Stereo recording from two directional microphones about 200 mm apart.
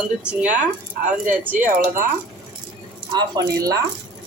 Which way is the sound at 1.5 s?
40° right (ahead or behind).